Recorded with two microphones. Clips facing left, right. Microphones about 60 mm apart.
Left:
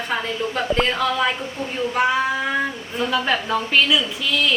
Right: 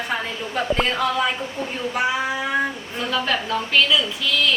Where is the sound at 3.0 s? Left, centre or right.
Centre.